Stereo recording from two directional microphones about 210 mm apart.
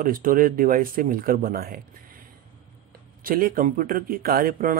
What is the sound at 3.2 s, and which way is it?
Speech, 40° right (ahead or behind).